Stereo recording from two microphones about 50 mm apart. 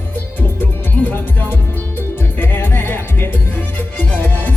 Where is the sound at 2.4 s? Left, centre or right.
Left.